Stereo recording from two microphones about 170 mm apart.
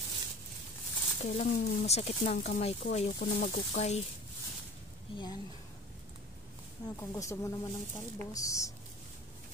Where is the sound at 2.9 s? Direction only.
55° left (ahead or behind).